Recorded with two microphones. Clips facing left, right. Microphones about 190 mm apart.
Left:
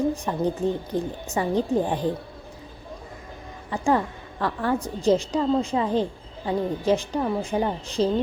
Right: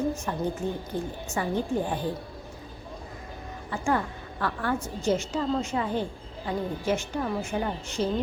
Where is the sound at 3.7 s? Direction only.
30° left (ahead or behind).